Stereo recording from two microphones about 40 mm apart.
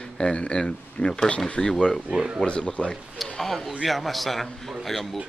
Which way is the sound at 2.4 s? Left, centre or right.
Left.